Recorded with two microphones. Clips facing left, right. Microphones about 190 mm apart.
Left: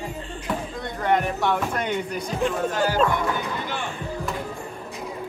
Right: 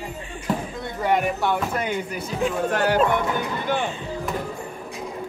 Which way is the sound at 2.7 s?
65° right (ahead or behind).